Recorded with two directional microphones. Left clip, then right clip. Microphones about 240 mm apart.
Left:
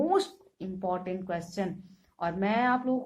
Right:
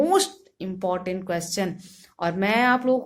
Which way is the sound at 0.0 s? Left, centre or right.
Right.